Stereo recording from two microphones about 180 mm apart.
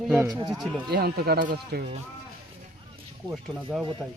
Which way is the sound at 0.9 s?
60° right (ahead or behind).